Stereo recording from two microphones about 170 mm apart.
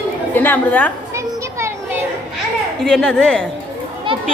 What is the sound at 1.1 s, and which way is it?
Children playing, 15° right (ahead or behind).